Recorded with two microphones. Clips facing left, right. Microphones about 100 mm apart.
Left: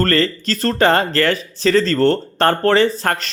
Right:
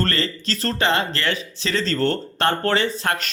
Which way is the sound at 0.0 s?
45° left (ahead or behind).